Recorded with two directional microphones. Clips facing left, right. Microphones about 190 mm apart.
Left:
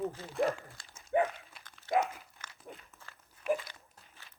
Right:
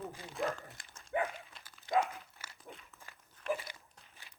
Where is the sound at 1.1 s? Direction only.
25° left (ahead or behind).